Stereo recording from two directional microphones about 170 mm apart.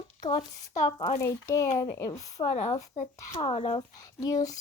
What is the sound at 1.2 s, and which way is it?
A woman's voice, 20° left (ahead or behind).